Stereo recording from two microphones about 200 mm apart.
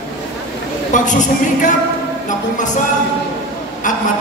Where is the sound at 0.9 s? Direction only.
40° left (ahead or behind).